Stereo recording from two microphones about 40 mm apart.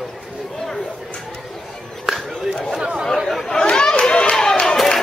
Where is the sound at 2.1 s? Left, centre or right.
Centre.